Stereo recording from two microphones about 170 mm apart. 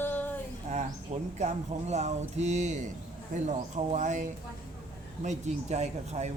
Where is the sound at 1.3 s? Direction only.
40° right (ahead or behind).